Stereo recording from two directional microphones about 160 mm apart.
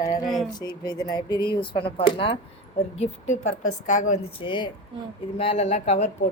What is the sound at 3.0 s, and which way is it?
A woman's voice, 45° left (ahead or behind).